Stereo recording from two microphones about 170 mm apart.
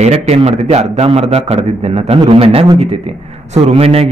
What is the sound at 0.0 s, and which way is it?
A man's voice, 40° right (ahead or behind).